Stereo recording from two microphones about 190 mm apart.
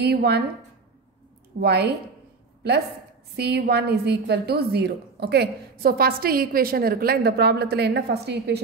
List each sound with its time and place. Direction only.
0.0 s a woman's voice: 60° right (ahead or behind)
1.6 s a woman's voice: 60° right (ahead or behind)
3.3 s a woman's voice: 55° right (ahead or behind)